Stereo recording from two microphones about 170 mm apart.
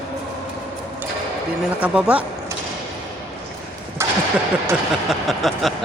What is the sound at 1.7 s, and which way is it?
Speech, 5° right (ahead or behind).